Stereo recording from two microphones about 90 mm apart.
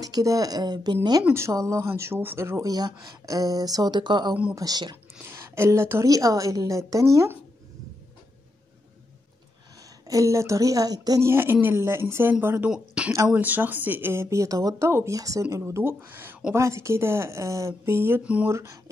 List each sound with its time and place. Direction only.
0.0 s speech: 40° right (ahead or behind)
1.3 s speech: 35° right (ahead or behind); by 4.9 s 50° right (ahead or behind)
5.2 s speech: 30° right (ahead or behind)
10.0 s speech: 40° right (ahead or behind)
11.2 s speech: 25° right (ahead or behind)
12.6 s speech: 10° right (ahead or behind); by 14.9 s 40° right (ahead or behind)
14.9 s speech: 30° right (ahead or behind)
15.1 s speech: 40° right (ahead or behind)
18.2 s speech: 15° right (ahead or behind)
18.5 s speech: 35° right (ahead or behind)